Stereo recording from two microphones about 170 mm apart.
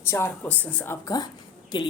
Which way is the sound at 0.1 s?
10° left (ahead or behind).